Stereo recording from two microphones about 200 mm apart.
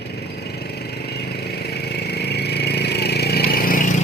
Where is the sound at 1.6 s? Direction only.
55° left (ahead or behind).